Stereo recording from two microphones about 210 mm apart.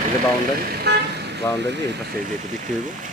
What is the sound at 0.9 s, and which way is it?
Speech, 50° right (ahead or behind).